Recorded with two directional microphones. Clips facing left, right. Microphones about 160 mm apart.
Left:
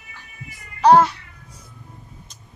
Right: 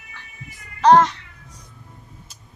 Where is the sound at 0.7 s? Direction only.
10° left (ahead or behind).